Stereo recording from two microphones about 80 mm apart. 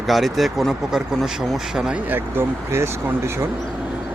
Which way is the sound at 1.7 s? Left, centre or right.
Centre.